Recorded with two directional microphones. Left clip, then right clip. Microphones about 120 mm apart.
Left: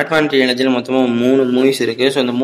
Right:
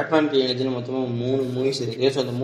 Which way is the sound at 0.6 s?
25° left (ahead or behind).